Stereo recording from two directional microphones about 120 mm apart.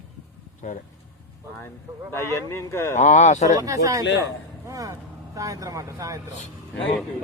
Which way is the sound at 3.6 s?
30° right (ahead or behind).